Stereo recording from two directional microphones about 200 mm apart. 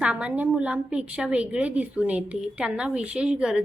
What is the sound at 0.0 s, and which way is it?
A woman's voice, 5° right (ahead or behind).